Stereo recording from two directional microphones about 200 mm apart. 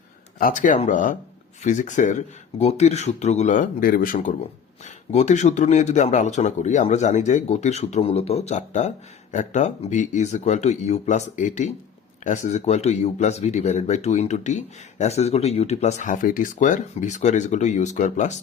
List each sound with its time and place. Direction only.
0.3 s speech: 45° left (ahead or behind)